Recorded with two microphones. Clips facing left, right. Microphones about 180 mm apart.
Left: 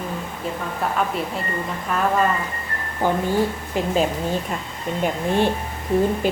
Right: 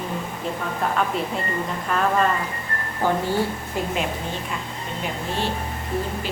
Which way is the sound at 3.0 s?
15° left (ahead or behind).